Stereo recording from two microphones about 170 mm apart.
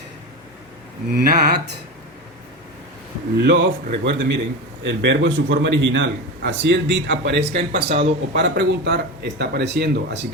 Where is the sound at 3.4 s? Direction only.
90° right.